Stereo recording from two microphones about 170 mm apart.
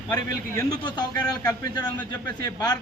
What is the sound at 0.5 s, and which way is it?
Speech, 25° left (ahead or behind).